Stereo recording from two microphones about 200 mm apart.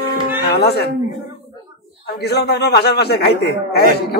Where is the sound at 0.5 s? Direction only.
55° left (ahead or behind).